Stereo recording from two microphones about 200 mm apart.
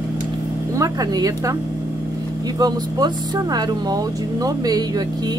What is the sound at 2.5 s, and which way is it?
Speech, 20° right (ahead or behind).